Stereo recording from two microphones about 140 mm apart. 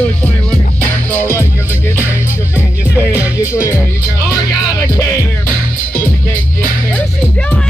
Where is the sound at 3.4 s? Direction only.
20° left (ahead or behind).